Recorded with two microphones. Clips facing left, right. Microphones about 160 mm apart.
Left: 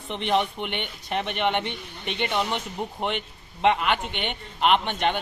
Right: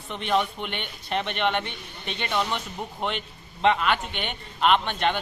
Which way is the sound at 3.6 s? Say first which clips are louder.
Even; 20° left (ahead or behind).